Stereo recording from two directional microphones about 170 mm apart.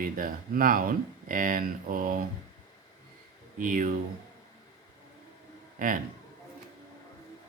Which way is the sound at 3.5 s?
50° right (ahead or behind).